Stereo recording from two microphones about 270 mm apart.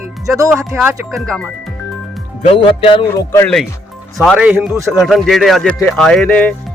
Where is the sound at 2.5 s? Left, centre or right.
Centre.